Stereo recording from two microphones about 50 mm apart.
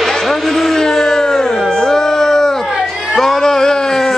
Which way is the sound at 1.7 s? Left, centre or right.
Centre.